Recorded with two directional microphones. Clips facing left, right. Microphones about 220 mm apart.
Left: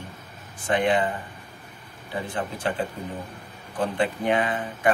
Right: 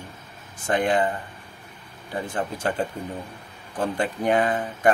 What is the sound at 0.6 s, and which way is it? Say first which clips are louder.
Speech: even; 45° right (ahead or behind).